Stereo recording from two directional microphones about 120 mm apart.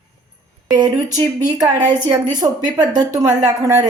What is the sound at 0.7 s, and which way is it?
A woman's voice, 30° right (ahead or behind).